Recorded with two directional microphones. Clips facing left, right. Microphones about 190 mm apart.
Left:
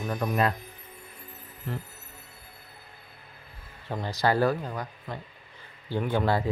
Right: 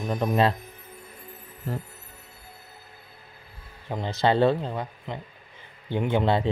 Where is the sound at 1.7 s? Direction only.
40° right (ahead or behind).